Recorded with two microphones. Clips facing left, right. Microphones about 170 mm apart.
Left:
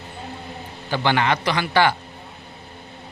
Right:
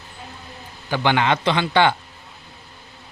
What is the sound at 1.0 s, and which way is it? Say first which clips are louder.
Speech: right 2 dB; 15° right (ahead or behind).